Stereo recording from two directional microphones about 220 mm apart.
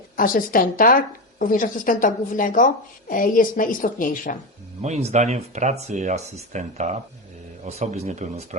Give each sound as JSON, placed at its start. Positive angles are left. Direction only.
{"t": 0.2, "sound": "a woman's voice", "side_deg": 40}
{"t": 4.8, "sound": "speech", "side_deg": -30}